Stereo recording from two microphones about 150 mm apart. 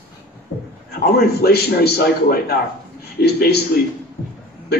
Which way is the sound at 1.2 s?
90° left.